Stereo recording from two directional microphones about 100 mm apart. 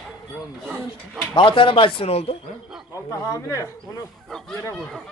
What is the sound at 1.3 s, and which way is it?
Speech, 55° left (ahead or behind).